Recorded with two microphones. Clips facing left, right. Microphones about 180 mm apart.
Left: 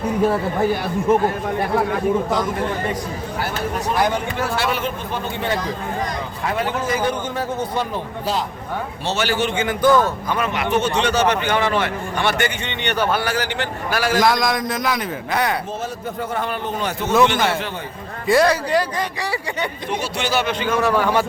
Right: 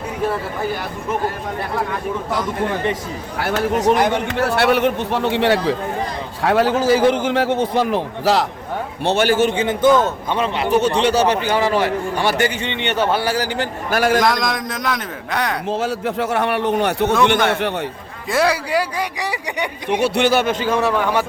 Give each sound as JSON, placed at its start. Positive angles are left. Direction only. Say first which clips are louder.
{"t": 3.8, "sound": "a man's voice", "louder": "right 2 dB", "side_deg": -70}
{"t": 9.0, "sound": "a man's voice", "louder": "right 6 dB", "side_deg": -55}
{"t": 9.6, "sound": "a man's voice", "louder": "left 1 dB", "side_deg": -25}
{"t": 13.3, "sound": "a man's voice", "louder": "right 2 dB", "side_deg": -40}
{"t": 14.2, "sound": "a man's voice", "louder": "left 1 dB", "side_deg": 0}
{"t": 15.8, "sound": "speech", "louder": "right 6 dB", "side_deg": -80}
{"t": 18.3, "sound": "speech", "louder": "left 2 dB", "side_deg": -5}
{"t": 20.0, "sound": "a man's voice", "louder": "right 7 dB", "side_deg": -60}
{"t": 21.0, "sound": "speech", "louder": "even", "side_deg": -15}